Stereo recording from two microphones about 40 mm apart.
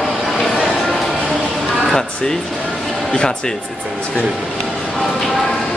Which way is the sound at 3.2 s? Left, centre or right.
Centre.